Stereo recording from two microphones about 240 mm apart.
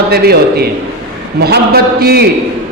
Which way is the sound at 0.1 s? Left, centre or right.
Right.